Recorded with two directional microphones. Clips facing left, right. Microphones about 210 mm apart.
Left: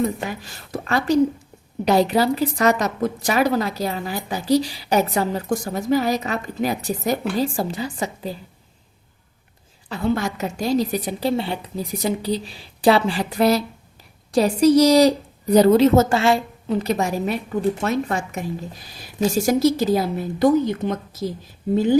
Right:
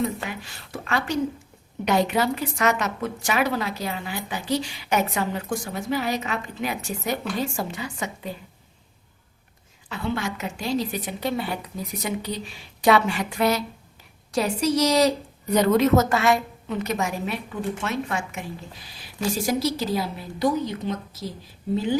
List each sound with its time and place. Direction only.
0.3 s a woman's voice: 40° left (ahead or behind)
9.9 s a woman's voice: 40° left (ahead or behind)